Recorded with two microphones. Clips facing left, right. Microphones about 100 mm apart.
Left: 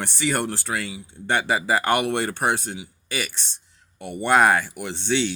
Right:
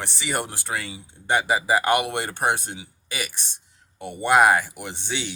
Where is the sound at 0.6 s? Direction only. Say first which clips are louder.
Left 2 dB; 20° right (ahead or behind).